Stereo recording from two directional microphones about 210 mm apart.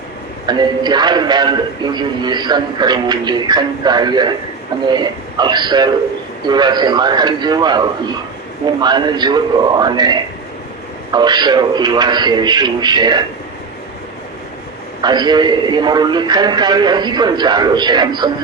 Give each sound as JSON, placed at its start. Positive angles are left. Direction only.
{"t": 0.4, "sound": "speech", "side_deg": -20}
{"t": 15.0, "sound": "speech", "side_deg": -20}